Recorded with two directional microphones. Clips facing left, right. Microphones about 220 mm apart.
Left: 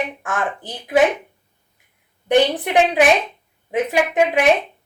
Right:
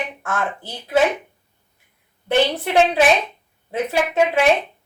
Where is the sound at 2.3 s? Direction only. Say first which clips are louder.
Left 3 dB; 15° left (ahead or behind).